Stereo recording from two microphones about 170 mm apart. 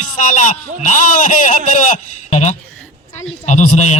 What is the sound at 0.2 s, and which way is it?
A man's voice, 50° left (ahead or behind).